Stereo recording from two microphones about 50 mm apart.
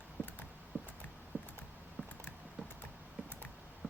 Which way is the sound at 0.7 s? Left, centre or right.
Right.